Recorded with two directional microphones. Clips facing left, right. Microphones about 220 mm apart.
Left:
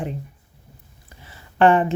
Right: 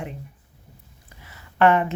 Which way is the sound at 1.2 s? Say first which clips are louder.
Left 2 dB; 30° left (ahead or behind).